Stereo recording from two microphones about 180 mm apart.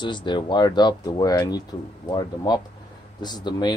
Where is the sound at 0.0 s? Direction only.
25° left (ahead or behind).